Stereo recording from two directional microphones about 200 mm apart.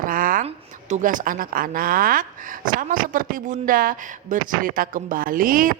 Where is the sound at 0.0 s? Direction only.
45° right (ahead or behind).